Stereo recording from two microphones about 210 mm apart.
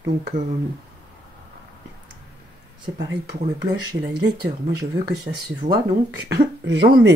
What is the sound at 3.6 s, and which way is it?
Speech, 55° right (ahead or behind).